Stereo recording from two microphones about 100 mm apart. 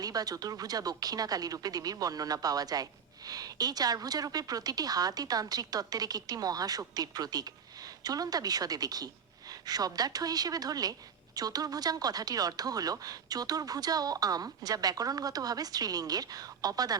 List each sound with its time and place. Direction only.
0.0 s speech: 40° right (ahead or behind)